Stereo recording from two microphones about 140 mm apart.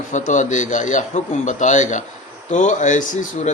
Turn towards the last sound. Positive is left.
turn(degrees=65)  # may be behind; listen again after turning